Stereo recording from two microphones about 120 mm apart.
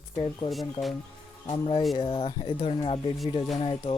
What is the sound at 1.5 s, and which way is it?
Speech, 45° left (ahead or behind).